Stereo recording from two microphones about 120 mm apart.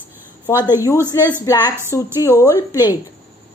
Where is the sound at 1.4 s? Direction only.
25° left (ahead or behind).